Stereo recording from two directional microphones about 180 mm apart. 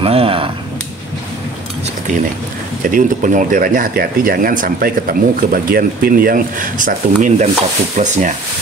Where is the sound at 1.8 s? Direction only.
45° right (ahead or behind).